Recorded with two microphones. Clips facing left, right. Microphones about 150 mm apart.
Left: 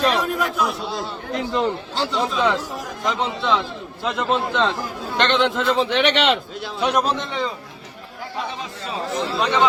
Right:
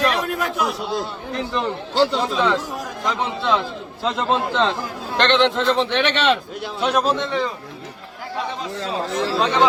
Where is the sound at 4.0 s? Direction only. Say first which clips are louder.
Right 1 dB; 25° right (ahead or behind).